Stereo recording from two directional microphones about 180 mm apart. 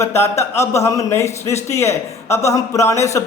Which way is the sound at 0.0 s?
15° left (ahead or behind).